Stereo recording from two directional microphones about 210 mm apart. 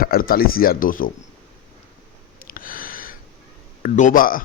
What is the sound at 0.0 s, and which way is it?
Speech, 45° left (ahead or behind).